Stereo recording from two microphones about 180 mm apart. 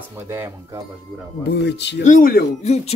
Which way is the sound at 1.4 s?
65° left (ahead or behind).